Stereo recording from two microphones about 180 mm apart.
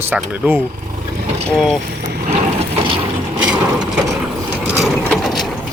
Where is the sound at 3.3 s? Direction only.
5° right (ahead or behind).